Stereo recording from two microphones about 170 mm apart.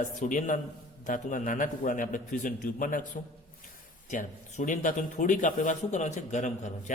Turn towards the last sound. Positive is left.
turn(degrees=45)  # may be behind; listen again after turning